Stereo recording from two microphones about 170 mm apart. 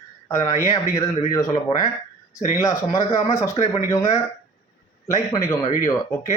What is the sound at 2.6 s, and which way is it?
Speech, 20° left (ahead or behind).